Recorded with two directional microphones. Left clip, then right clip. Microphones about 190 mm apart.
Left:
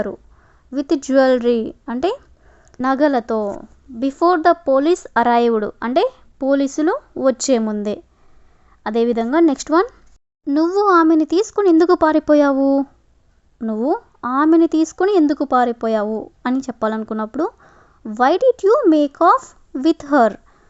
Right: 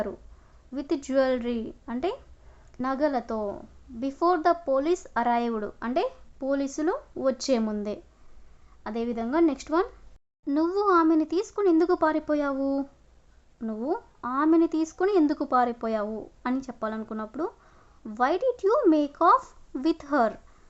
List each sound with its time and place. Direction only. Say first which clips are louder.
0.7 s speech: left 10 dB; 35° left (ahead or behind)
10.4 s speech: left 9 dB; 35° left (ahead or behind)